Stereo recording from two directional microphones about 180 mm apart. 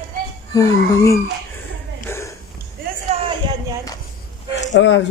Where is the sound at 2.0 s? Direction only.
15° left (ahead or behind).